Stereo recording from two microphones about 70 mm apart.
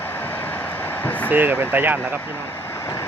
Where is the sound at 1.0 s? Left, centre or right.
Left.